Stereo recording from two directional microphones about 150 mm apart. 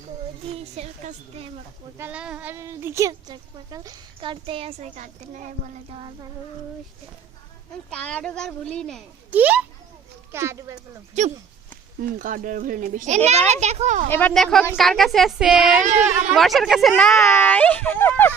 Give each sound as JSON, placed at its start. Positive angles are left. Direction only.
{"t": 0.5, "sound": "speech", "side_deg": -45}
{"t": 2.0, "sound": "a woman's voice", "side_deg": -10}
{"t": 4.9, "sound": "a child's voice", "side_deg": -55}
{"t": 7.9, "sound": "speech", "side_deg": 5}
{"t": 9.3, "sound": "a woman's voice", "side_deg": -10}
{"t": 11.2, "sound": "speech", "side_deg": -50}
{"t": 12.0, "sound": "a child's voice", "side_deg": -65}
{"t": 14.1, "sound": "speech", "side_deg": 10}
{"t": 17.1, "sound": "speech", "side_deg": 15}